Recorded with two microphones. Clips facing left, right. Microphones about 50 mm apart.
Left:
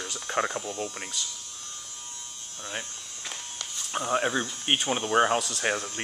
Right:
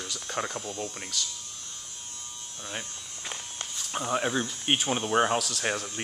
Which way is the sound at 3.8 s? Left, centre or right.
Centre.